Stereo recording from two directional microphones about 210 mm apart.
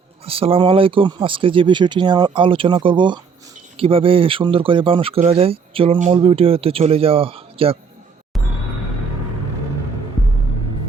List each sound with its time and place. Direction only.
0.3 s speech: 25° right (ahead or behind)